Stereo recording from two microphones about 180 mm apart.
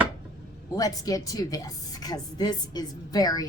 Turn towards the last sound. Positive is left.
turn(degrees=20)  # may be behind; listen again after turning